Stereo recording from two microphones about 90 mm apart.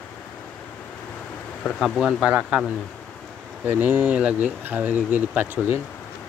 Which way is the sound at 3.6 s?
20° right (ahead or behind).